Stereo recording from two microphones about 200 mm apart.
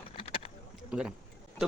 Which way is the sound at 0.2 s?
25° left (ahead or behind).